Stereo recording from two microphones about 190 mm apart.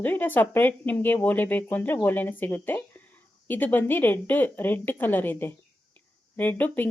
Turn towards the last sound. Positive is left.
turn(degrees=10)  # may be behind; listen again after turning